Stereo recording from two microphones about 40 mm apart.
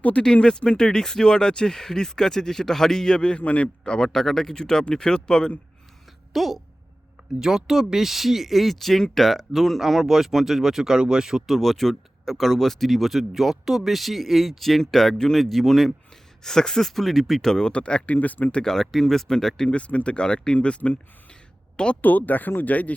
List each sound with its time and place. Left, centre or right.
0.4 s speech: left
3.8 s speech: left
6.3 s speech: centre
7.3 s speech: centre
11.4 s speech: centre
17.5 s speech: centre
17.7 s speech: left
18.6 s speech: centre
19.7 s speech: left
22.0 s speech: left